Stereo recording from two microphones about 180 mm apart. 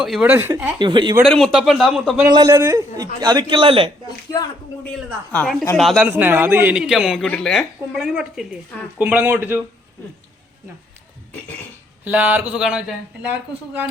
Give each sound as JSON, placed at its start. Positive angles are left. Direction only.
{"t": 0.0, "sound": "a man's voice", "side_deg": -5}
{"t": 0.8, "sound": "a man's voice", "side_deg": -25}
{"t": 1.2, "sound": "speech", "side_deg": 0}
{"t": 2.3, "sound": "a man's voice", "side_deg": -20}
{"t": 4.3, "sound": "speech", "side_deg": 20}
{"t": 5.3, "sound": "speech", "side_deg": 5}
{"t": 6.1, "sound": "a man's voice", "side_deg": -10}
{"t": 12.0, "sound": "a man's voice", "side_deg": -10}